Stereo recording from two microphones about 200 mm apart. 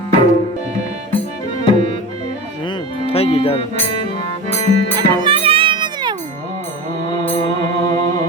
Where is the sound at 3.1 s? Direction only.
30° left (ahead or behind).